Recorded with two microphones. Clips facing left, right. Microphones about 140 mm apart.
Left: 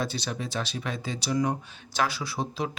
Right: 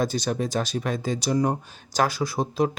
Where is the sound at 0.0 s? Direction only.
45° right (ahead or behind).